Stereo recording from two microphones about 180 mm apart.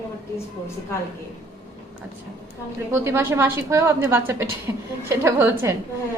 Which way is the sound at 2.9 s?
15° right (ahead or behind).